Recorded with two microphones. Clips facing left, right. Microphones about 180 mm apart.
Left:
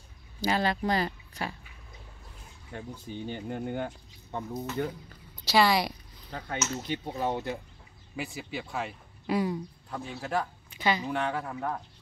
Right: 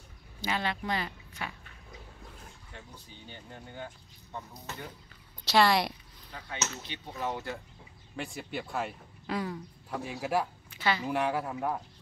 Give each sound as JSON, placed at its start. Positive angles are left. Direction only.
{"t": 0.4, "sound": "speech", "side_deg": 40}
{"t": 2.7, "sound": "speech", "side_deg": 55}
{"t": 5.4, "sound": "speech", "side_deg": 0}
{"t": 6.3, "sound": "speech", "side_deg": 45}
{"t": 8.2, "sound": "speech", "side_deg": 5}
{"t": 9.3, "sound": "speech", "side_deg": 10}
{"t": 9.8, "sound": "speech", "side_deg": -5}
{"t": 10.7, "sound": "a woman's voice", "side_deg": 15}
{"t": 11.1, "sound": "speech", "side_deg": -5}